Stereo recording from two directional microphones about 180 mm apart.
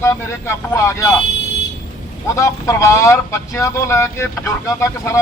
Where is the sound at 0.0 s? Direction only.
15° left (ahead or behind).